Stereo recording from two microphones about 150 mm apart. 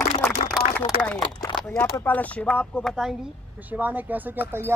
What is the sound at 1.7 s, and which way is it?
Speech, 10° left (ahead or behind).